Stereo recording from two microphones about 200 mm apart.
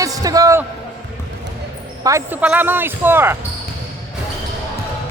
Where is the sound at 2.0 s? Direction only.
10° right (ahead or behind).